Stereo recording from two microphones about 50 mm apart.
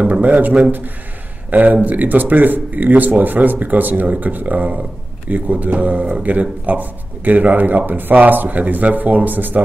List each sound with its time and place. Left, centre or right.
0.0 s speech: right